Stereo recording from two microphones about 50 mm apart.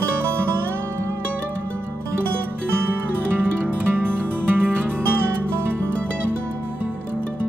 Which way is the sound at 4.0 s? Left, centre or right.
Right.